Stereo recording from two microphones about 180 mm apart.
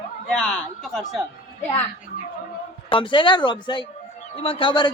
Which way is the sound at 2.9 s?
25° left (ahead or behind).